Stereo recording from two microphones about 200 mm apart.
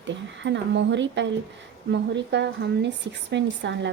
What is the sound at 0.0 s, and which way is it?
Speech, 65° right (ahead or behind).